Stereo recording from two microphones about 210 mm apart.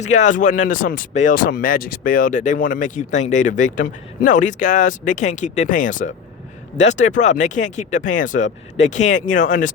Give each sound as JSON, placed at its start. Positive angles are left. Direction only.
{"t": 0.0, "sound": "speech", "side_deg": 35}